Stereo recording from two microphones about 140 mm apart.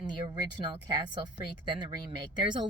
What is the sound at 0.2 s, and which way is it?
Speech, 35° right (ahead or behind).